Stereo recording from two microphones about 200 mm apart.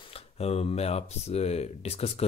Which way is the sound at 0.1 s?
30° left (ahead or behind).